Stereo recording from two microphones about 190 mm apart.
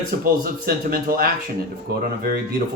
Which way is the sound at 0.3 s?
50° right (ahead or behind).